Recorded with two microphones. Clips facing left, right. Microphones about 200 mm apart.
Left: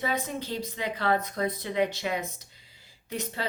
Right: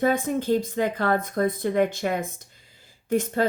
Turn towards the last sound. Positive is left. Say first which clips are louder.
# right 11 dB
turn(degrees=-50)  # may be behind; listen again after turning